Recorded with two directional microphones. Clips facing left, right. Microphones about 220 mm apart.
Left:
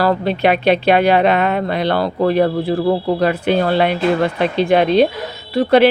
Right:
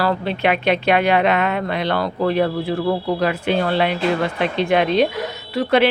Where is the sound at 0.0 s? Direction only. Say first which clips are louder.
Left 4 dB; 40° left (ahead or behind).